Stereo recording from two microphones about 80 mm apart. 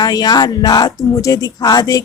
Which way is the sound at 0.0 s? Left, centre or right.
Left.